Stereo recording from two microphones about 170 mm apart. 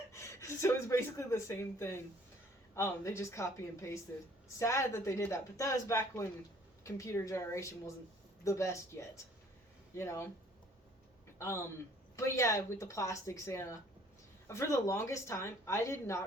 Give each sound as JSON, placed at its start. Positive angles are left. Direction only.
{"t": 0.1, "sound": "speech", "side_deg": 15}
{"t": 11.3, "sound": "a man's voice", "side_deg": 15}